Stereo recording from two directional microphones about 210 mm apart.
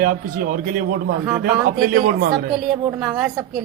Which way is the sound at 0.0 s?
45° right (ahead or behind).